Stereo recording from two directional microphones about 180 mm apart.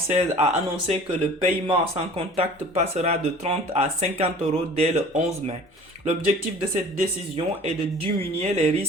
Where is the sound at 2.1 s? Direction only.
35° right (ahead or behind).